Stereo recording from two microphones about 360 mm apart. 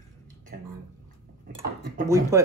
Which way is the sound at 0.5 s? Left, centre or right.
Right.